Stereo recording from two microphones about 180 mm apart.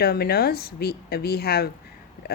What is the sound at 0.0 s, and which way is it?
A woman's voice, 60° left (ahead or behind).